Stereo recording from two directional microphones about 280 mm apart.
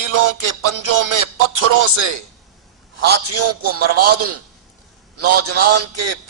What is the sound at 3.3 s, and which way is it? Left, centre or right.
A man's voice, right.